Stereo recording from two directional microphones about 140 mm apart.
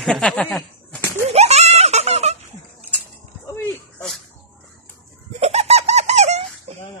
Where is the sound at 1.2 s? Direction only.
50° right (ahead or behind).